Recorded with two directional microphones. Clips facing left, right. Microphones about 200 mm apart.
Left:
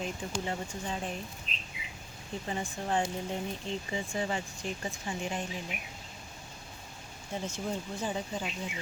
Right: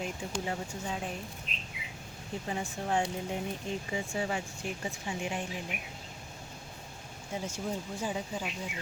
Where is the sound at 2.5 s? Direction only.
10° right (ahead or behind).